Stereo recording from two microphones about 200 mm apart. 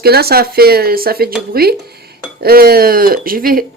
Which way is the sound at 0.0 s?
50° right (ahead or behind).